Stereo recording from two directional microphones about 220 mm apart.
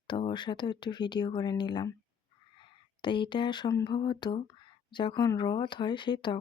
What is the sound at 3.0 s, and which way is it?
Speech, 20° left (ahead or behind).